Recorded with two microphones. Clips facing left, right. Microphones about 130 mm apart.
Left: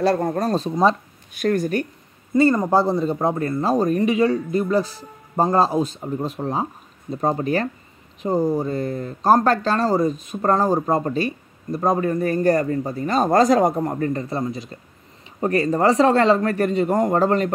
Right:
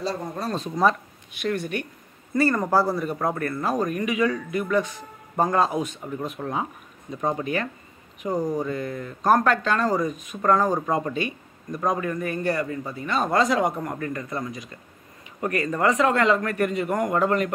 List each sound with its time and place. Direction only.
0.0 s speech: 60° left (ahead or behind)
0.5 s speech: 30° left (ahead or behind)
1.3 s speech: 40° left (ahead or behind)
2.3 s speech: 20° left (ahead or behind)